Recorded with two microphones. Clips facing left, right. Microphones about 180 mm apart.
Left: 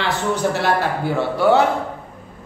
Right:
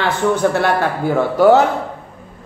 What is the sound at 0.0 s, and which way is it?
A man's voice, 50° right (ahead or behind).